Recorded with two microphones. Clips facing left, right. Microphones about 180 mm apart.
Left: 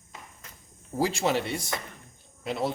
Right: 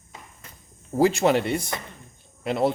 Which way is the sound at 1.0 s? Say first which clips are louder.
Right 7 dB; 60° right (ahead or behind).